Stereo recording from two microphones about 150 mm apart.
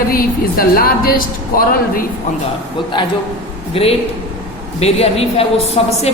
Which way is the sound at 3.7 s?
40° left (ahead or behind).